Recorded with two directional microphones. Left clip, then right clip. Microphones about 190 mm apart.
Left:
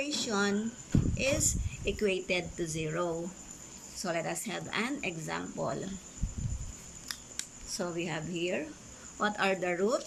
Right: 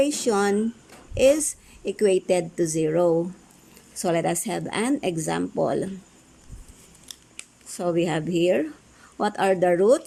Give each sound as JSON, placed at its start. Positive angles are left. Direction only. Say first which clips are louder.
{"t": 0.0, "sound": "a woman's voice", "louder": "right 10 dB", "side_deg": -40}
{"t": 7.8, "sound": "a woman's voice", "louder": "right 12 dB", "side_deg": -45}